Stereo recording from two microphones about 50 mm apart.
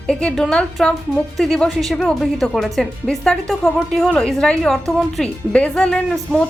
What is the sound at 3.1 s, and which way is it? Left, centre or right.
Speech, centre.